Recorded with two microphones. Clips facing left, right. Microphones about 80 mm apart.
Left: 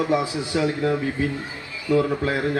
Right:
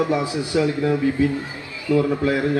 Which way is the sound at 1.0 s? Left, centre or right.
Left.